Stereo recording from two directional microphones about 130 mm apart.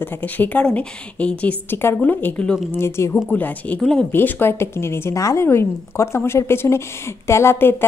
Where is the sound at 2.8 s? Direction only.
20° left (ahead or behind); by 4.1 s 5° left (ahead or behind).